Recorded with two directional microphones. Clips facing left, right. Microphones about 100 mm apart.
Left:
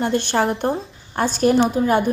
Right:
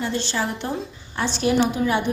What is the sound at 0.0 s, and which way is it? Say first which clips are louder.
A woman's voice: left 6 dB; 55° left (ahead or behind).